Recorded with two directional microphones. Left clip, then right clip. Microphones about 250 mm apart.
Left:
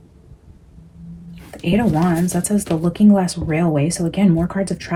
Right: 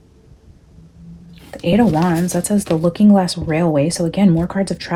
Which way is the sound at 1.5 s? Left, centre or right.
Right.